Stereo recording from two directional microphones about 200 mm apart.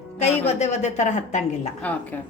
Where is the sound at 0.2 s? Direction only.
35° left (ahead or behind).